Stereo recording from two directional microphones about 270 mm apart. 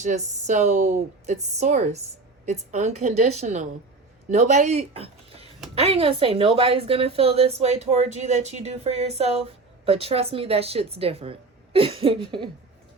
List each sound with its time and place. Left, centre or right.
0.0 s speech: right